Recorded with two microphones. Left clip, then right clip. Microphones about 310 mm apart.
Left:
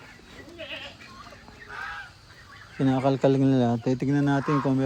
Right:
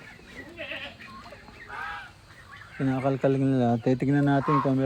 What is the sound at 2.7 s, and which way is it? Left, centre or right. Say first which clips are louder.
Speech: left 3 dB; centre.